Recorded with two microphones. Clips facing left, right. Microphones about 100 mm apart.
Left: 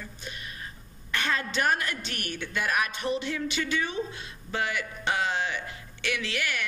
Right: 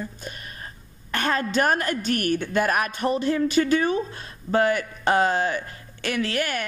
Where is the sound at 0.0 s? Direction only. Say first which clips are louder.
Right 6 dB; 45° right (ahead or behind).